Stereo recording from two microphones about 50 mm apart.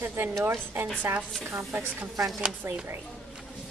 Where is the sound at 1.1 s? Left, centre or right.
Right.